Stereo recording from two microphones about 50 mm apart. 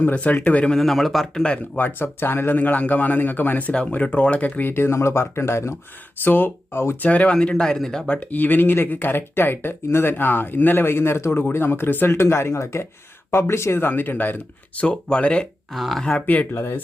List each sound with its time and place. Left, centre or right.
0.0 s a man's voice: left
0.8 s a man's voice: centre
1.4 s speech: left
1.8 s a man's voice: left
4.7 s speech: left
6.2 s a man's voice: left
7.0 s speech: left
8.3 s speech: left
12.0 s speech: left
13.3 s speech: left
14.8 s speech: left
15.7 s a man's voice: centre
16.2 s a man's voice: left